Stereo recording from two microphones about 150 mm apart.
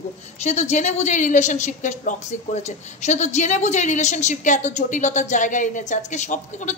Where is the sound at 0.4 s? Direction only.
50° left (ahead or behind).